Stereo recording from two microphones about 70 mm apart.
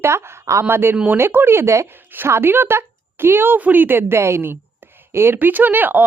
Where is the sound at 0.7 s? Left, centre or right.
Right.